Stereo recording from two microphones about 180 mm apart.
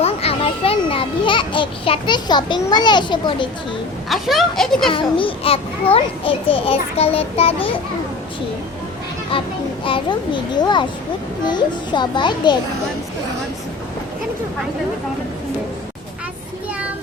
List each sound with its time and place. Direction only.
0.0 s children playing: 35° left (ahead or behind)
4.1 s a child's voice: centre (ahead or behind)
4.9 s a child's voice: 30° left (ahead or behind)
9.3 s a child's voice: 30° left (ahead or behind)